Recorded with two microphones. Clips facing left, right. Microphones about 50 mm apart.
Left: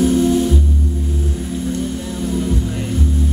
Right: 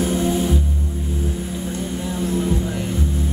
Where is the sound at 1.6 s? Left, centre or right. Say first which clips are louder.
Left 4 dB; centre.